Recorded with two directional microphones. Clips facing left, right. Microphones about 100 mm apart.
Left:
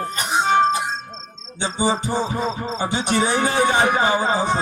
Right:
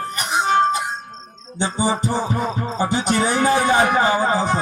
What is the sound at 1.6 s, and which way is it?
Music, 20° left (ahead or behind).